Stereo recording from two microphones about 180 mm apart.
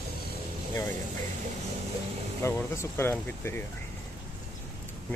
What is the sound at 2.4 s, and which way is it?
Speech, 15° left (ahead or behind).